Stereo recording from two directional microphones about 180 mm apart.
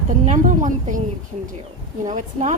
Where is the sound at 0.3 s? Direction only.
45° right (ahead or behind).